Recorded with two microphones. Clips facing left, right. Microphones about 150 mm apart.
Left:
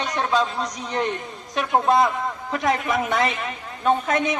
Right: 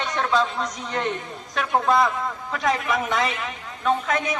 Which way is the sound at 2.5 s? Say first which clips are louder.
Left 1 dB; 25° left (ahead or behind).